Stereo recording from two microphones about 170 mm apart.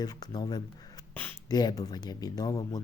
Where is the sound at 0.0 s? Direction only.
25° left (ahead or behind).